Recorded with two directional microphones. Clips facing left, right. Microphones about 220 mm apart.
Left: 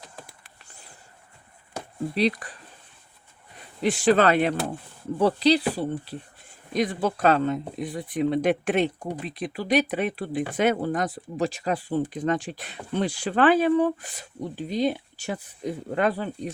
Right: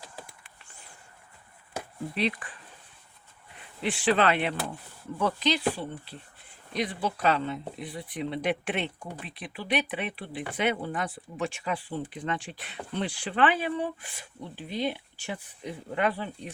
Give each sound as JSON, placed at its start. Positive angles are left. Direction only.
{"t": 0.3, "sound": "a sound", "side_deg": 35}
{"t": 2.1, "sound": "speech", "side_deg": 40}
{"t": 3.6, "sound": "speech", "side_deg": 40}